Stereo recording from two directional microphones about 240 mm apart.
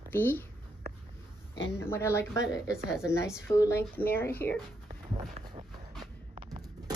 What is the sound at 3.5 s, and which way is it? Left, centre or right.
Speech, centre.